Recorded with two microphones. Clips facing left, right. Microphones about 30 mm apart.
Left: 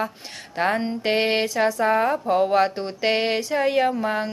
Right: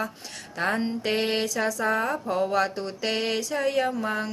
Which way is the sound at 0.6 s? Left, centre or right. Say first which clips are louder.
Left 4 dB; centre.